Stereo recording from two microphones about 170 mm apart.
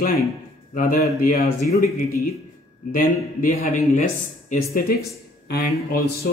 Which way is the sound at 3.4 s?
50° left (ahead or behind).